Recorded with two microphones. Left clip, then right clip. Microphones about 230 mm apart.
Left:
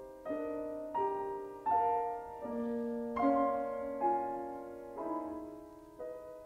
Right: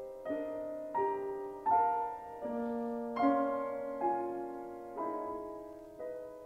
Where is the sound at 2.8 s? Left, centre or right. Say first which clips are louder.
Right 1 dB; right.